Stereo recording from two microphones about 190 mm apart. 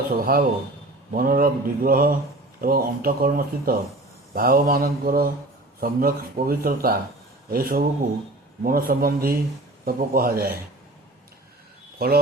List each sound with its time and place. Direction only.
0.1 s speech: 50° right (ahead or behind)
11.9 s speech: 50° right (ahead or behind)